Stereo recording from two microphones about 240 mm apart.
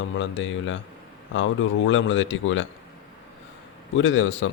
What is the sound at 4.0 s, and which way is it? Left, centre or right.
Speech, left.